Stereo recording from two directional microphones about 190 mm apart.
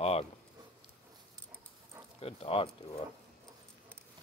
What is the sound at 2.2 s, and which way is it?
Speech, 30° left (ahead or behind).